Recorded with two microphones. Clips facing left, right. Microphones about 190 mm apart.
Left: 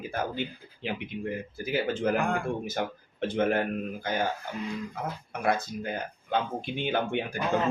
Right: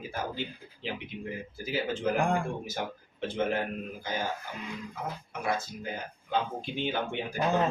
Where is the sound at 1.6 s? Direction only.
60° left (ahead or behind).